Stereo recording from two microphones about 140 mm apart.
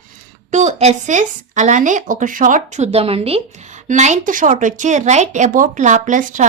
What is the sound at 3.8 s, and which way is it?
Speech, 60° right (ahead or behind).